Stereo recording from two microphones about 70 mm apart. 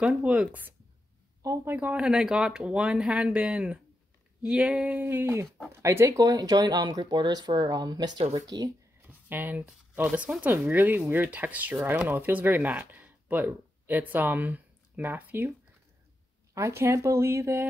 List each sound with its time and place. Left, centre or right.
0.0 s speech: centre
1.4 s a woman's voice: right
1.8 s speech: centre
5.0 s speech: right
6.1 s speech: right
9.0 s a sound: right
10.0 s speech: centre
16.5 s speech: right